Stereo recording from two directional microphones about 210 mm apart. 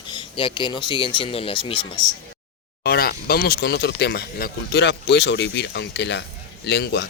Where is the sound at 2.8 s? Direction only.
50° left (ahead or behind).